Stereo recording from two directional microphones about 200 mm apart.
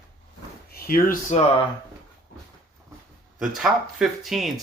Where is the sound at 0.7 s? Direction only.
50° left (ahead or behind).